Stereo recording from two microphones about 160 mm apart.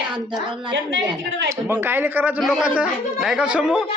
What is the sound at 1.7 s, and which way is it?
Speech, 15° right (ahead or behind).